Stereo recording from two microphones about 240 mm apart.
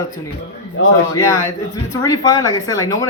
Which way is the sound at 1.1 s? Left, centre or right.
Centre.